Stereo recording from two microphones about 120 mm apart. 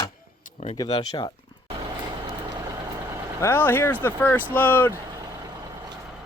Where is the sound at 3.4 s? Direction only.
20° left (ahead or behind).